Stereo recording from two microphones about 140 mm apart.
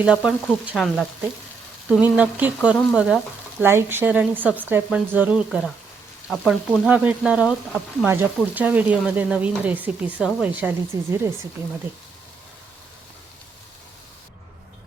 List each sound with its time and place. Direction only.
0.0 s speech: 5° right (ahead or behind)
0.6 s frying: 5° right (ahead or behind)
1.9 s speech: 10° right (ahead or behind)
10.9 s speech: 25° right (ahead or behind)